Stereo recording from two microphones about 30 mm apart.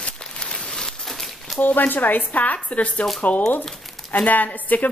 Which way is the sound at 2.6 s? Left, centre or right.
Left.